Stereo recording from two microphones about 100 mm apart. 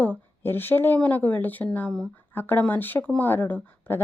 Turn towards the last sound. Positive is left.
turn(degrees=20)  # may be behind; listen again after turning